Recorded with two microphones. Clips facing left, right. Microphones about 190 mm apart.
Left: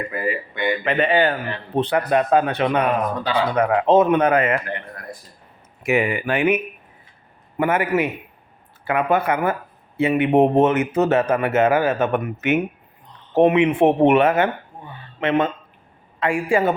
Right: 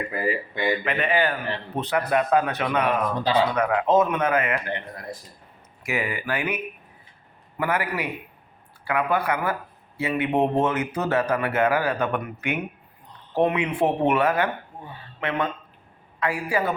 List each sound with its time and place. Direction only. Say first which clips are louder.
0.1 s a man's voice: left 1 dB; 35° right (ahead or behind)
0.9 s a man's voice: left 5 dB; 30° left (ahead or behind)
5.8 s speech: left 8 dB; 25° left (ahead or behind)
7.6 s speech: left 7 dB; 25° left (ahead or behind)